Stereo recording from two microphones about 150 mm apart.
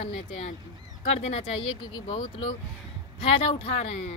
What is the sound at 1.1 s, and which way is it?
A woman's voice, 40° left (ahead or behind).